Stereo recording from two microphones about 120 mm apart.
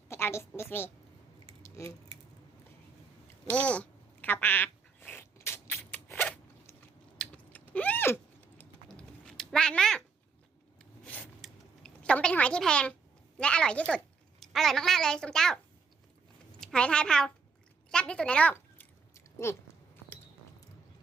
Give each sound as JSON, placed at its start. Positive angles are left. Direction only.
{"t": 0.1, "sound": "a woman's voice", "side_deg": 20}
{"t": 1.6, "sound": "a sound", "side_deg": 25}
{"t": 3.5, "sound": "a sound", "side_deg": 10}
{"t": 7.2, "sound": "typing", "side_deg": 10}
{"t": 8.9, "sound": "cat", "side_deg": 5}
{"t": 11.0, "sound": "a sound", "side_deg": 10}
{"t": 13.4, "sound": "a woman's voice", "side_deg": 10}
{"t": 16.6, "sound": "speech", "side_deg": 5}
{"t": 17.9, "sound": "chewing", "side_deg": 10}